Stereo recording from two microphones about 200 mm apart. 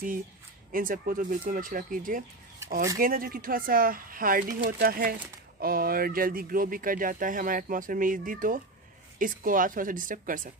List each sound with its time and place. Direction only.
0.7 s speech: 45° right (ahead or behind)